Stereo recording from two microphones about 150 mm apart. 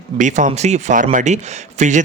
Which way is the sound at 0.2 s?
55° right (ahead or behind).